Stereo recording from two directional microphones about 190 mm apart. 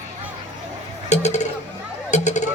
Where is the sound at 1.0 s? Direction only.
35° left (ahead or behind).